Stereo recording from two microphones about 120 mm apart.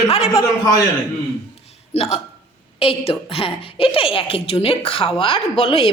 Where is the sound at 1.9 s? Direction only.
60° left (ahead or behind).